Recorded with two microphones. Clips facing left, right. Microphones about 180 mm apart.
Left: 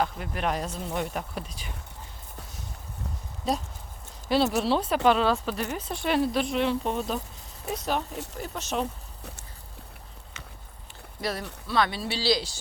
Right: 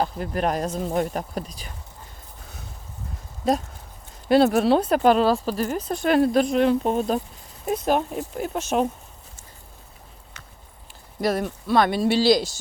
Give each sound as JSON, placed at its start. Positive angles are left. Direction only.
{"t": 0.0, "sound": "speech", "side_deg": -40}
{"t": 4.3, "sound": "speech", "side_deg": -55}
{"t": 11.2, "sound": "speech", "side_deg": -50}